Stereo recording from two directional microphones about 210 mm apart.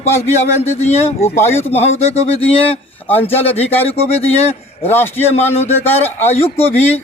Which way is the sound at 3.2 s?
10° left (ahead or behind).